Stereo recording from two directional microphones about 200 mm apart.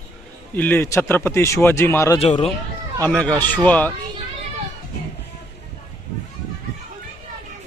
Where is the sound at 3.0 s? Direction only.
5° left (ahead or behind).